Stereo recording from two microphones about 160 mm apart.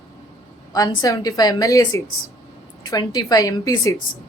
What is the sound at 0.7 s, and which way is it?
Speech, 25° left (ahead or behind).